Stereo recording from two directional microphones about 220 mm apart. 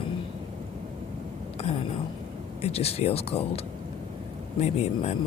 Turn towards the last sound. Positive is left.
turn(degrees=30)  # may be behind; listen again after turning